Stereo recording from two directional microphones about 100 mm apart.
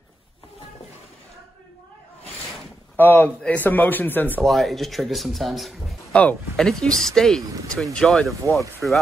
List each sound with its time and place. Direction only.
3.0 s a man's voice: 20° left (ahead or behind)
4.4 s a man's voice: centre (ahead or behind)